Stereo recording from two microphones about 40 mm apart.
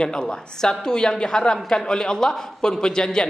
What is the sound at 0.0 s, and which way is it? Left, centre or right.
A man's voice, centre.